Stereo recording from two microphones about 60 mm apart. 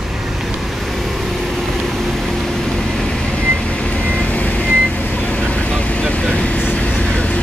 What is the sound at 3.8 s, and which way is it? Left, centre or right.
Vehicle, left.